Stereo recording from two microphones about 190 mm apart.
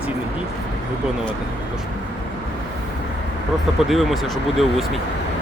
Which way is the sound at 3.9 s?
Centre (ahead or behind).